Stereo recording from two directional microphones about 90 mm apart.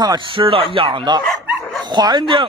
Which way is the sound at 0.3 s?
75° right (ahead or behind).